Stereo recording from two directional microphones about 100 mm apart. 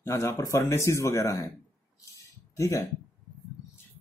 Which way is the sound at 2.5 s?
35° left (ahead or behind).